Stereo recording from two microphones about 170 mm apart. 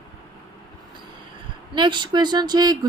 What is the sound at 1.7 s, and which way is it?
Speech, 25° right (ahead or behind).